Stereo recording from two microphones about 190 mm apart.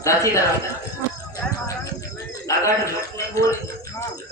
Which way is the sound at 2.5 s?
15° left (ahead or behind).